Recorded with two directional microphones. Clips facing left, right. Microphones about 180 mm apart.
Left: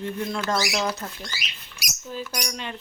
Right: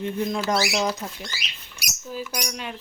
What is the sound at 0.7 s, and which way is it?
Speech, 5° right (ahead or behind).